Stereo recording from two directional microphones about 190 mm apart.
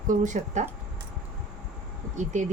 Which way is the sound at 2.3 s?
40° right (ahead or behind).